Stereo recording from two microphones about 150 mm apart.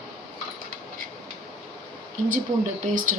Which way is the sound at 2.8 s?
60° right (ahead or behind).